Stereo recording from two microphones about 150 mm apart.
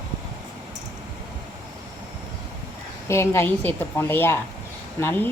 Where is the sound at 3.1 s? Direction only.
20° left (ahead or behind).